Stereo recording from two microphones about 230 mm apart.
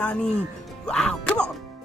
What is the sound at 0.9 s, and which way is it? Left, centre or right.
Music, centre.